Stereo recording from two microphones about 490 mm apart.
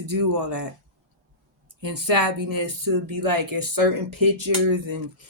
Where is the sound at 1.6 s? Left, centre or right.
Right.